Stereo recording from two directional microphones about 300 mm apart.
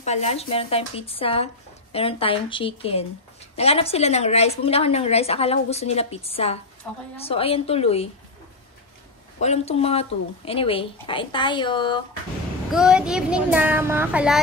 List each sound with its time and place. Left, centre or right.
0.0 s speech: left
9.4 s speech: left
12.7 s speech: centre